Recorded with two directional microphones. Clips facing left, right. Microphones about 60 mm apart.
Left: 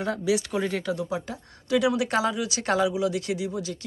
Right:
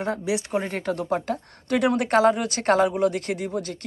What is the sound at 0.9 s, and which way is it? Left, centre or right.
Speech, right.